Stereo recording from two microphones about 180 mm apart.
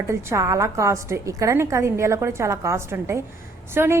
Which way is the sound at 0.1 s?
15° right (ahead or behind).